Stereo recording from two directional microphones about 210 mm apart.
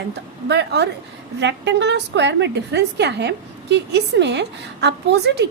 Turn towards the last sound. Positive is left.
turn(degrees=-55)  # may be behind; listen again after turning